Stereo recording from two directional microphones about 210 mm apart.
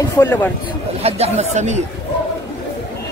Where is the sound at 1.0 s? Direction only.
30° right (ahead or behind).